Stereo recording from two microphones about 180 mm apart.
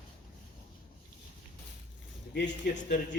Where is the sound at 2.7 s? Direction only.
45° left (ahead or behind).